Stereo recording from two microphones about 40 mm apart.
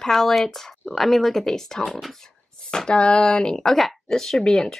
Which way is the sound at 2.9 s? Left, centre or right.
Left.